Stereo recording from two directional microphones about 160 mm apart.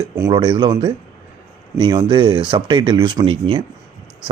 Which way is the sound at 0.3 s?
30° right (ahead or behind).